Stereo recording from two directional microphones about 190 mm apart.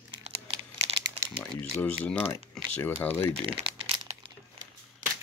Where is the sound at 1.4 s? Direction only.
5° left (ahead or behind).